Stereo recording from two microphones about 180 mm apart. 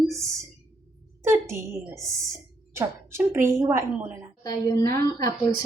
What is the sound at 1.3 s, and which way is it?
A woman's voice, 15° right (ahead or behind).